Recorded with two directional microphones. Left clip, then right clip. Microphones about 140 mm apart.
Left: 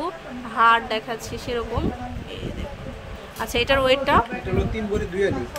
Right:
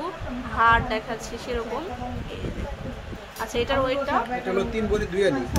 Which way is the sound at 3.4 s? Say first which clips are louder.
Left 4 dB; 40° left (ahead or behind).